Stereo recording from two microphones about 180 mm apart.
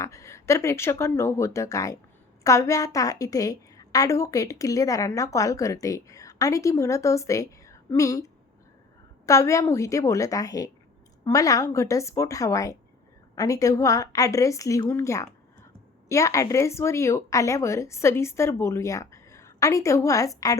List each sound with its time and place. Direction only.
0.0 s a woman's voice: 15° left (ahead or behind)